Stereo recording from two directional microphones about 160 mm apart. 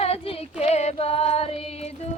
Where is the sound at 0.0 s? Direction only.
40° left (ahead or behind).